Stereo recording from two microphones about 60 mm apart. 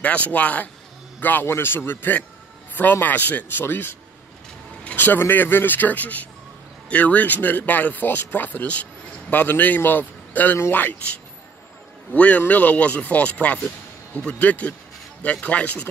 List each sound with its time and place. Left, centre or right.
0.0 s speech: left
4.9 s speech: left
12.2 s speech: left